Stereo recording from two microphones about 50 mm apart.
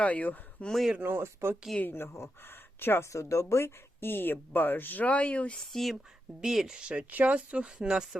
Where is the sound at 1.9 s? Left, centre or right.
Left.